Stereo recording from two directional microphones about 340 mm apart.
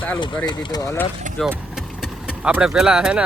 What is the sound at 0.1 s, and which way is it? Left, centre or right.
Speech, centre.